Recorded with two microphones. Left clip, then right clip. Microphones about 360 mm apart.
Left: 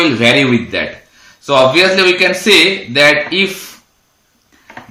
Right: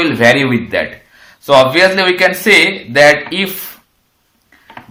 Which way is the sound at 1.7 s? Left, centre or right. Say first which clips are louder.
Even; centre.